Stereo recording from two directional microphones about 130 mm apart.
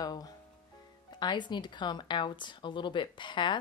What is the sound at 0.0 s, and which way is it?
Music, 30° left (ahead or behind).